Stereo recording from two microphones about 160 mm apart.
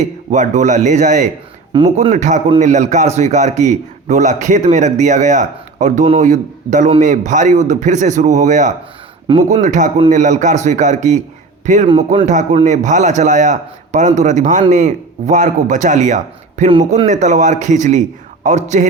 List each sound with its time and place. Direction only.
0.0 s a man's voice: 50° right (ahead or behind)
11.9 s a man's voice: 40° right (ahead or behind)
17.1 s a man's voice: 50° right (ahead or behind)